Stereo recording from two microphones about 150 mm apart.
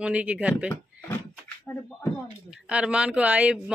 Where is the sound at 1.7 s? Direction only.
15° left (ahead or behind).